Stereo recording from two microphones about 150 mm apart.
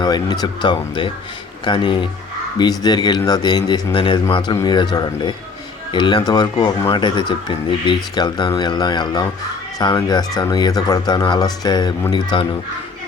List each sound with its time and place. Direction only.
0.0 s speech: 30° left (ahead or behind)